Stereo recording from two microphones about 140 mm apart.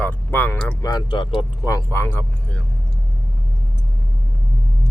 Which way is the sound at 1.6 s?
20° left (ahead or behind).